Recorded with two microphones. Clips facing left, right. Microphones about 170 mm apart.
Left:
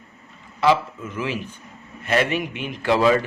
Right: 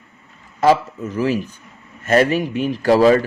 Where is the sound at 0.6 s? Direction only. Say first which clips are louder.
Right 4 dB; 40° right (ahead or behind).